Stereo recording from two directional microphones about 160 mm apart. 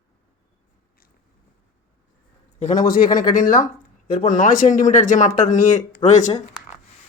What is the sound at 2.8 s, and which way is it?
Speech, 65° left (ahead or behind).